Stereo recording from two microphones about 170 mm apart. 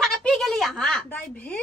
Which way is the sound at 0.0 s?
5° left (ahead or behind).